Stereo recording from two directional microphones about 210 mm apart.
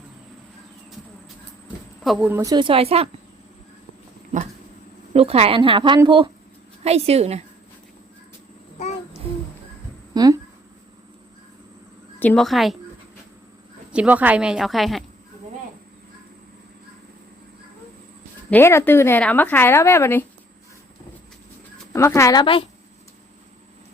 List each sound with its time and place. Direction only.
1.6 s speech: 5° right (ahead or behind); by 3.1 s 30° right (ahead or behind)
5.1 s a woman's voice: 30° right (ahead or behind)
12.2 s a woman's voice: 5° left (ahead or behind)
13.9 s a woman's voice: 5° right (ahead or behind)
18.5 s speech: 10° left (ahead or behind)
21.9 s speech: 15° left (ahead or behind)